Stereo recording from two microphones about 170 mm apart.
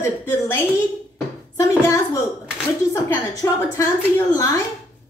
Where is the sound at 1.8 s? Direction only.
20° left (ahead or behind).